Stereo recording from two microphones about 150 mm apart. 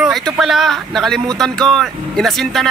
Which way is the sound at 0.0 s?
Centre (ahead or behind).